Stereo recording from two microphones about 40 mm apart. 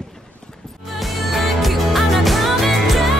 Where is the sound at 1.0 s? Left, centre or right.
Centre.